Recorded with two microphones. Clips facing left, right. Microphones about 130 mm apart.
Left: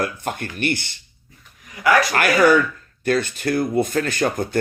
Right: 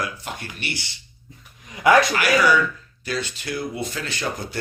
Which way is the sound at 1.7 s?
25° right (ahead or behind).